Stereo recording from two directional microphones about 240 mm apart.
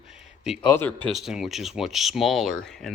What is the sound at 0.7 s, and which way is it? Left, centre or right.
Speech, centre.